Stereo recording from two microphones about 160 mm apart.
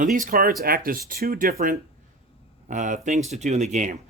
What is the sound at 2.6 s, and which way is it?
Speech, 50° right (ahead or behind).